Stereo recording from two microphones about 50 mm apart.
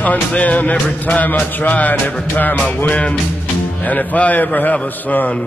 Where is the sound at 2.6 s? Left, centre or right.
Left.